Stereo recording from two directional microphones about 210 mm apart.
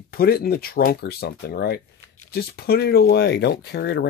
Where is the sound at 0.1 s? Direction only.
45° left (ahead or behind).